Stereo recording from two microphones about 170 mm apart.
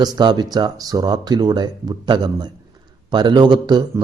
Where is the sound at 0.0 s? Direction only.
25° right (ahead or behind).